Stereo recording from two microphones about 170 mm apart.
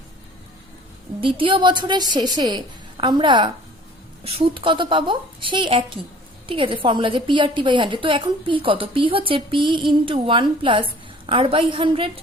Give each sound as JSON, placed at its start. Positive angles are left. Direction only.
{"t": 1.2, "sound": "a woman's voice", "side_deg": -30}